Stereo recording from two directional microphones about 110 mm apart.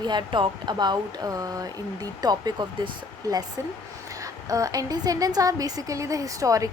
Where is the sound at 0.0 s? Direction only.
40° right (ahead or behind).